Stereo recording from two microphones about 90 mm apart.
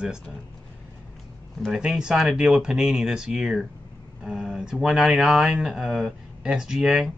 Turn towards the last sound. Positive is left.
turn(degrees=-5)  # may be behind; listen again after turning